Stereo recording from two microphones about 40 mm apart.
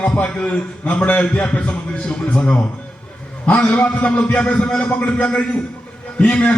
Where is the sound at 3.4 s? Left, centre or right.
Left.